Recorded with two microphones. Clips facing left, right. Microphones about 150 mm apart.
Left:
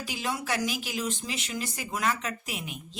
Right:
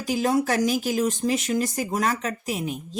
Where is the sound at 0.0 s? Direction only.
40° right (ahead or behind).